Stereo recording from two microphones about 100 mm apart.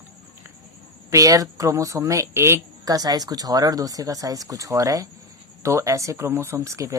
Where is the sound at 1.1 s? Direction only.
35° right (ahead or behind).